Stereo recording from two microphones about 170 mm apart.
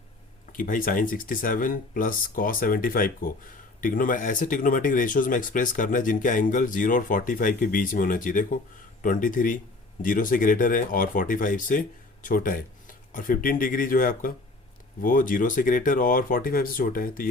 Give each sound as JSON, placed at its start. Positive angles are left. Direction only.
{"t": 0.5, "sound": "speech", "side_deg": 55}